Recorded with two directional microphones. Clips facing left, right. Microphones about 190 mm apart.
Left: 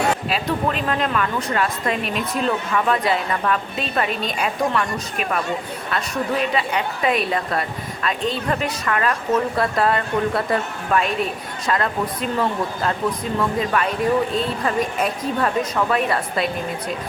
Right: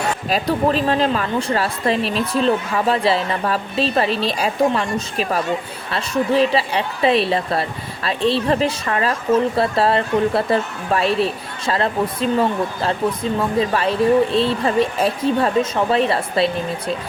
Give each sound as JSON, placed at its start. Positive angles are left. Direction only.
{"t": 0.3, "sound": "a woman's voice", "side_deg": -35}